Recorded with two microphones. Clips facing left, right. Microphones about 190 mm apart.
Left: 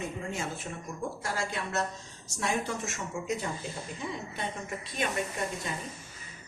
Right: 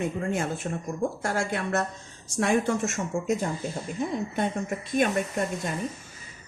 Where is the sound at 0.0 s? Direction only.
55° right (ahead or behind).